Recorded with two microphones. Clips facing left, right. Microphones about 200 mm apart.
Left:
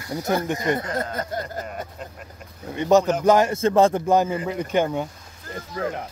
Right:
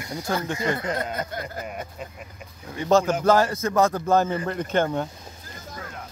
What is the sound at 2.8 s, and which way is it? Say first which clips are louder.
Speech: left 2 dB; 15° left (ahead or behind).